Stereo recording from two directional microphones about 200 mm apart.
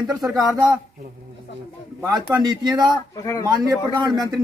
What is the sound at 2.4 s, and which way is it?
Speech, 20° right (ahead or behind).